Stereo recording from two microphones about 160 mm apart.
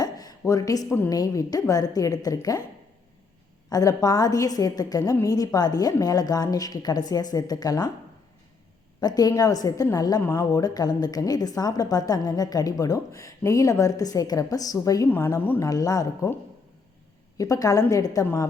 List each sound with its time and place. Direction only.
0.0 s a woman's voice: 25° left (ahead or behind)
3.7 s a woman's voice: 25° left (ahead or behind)
9.0 s a woman's voice: 25° left (ahead or behind)
17.3 s a woman's voice: 20° left (ahead or behind)